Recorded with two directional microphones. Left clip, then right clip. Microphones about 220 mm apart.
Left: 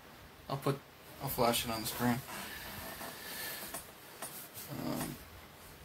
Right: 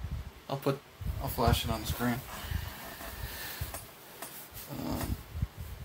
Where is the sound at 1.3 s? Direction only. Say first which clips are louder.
Right 1 dB; 15° right (ahead or behind).